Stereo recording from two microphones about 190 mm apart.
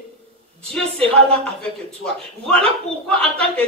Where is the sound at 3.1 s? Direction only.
5° left (ahead or behind).